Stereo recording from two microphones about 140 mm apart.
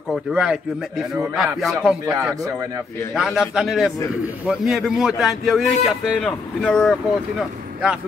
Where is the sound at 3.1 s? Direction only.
Centre (ahead or behind).